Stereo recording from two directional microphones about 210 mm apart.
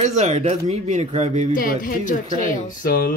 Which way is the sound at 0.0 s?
35° right (ahead or behind).